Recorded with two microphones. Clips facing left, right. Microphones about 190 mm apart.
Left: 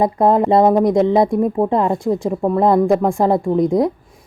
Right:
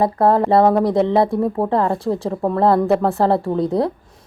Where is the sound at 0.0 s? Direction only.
20° left (ahead or behind).